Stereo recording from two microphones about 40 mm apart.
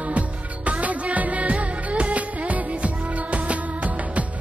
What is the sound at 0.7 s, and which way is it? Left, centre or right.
Music, right.